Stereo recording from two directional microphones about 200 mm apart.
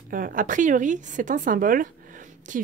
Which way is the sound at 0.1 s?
40° right (ahead or behind).